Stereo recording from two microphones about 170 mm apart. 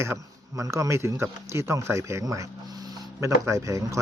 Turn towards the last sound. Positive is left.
turn(degrees=-20)  # may be behind; listen again after turning